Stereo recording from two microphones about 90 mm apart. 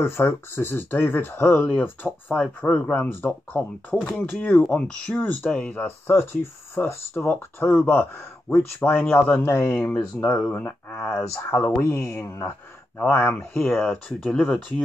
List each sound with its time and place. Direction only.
0.0 s speech: 25° left (ahead or behind)
13.0 s speech: 20° left (ahead or behind)
13.6 s speech: 5° left (ahead or behind)